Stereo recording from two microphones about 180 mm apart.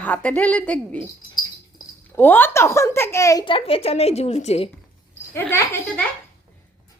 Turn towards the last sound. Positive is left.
turn(degrees=10)  # may be behind; listen again after turning